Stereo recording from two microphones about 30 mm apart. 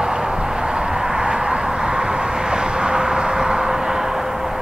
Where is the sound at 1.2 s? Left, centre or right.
Right.